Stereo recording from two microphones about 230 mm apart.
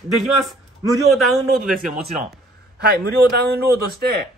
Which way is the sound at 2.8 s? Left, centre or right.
Right.